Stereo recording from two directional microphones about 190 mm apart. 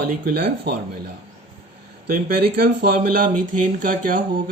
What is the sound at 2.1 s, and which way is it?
Speech, 50° right (ahead or behind).